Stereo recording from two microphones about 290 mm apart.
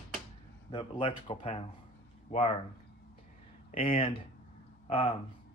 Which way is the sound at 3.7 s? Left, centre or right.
Centre.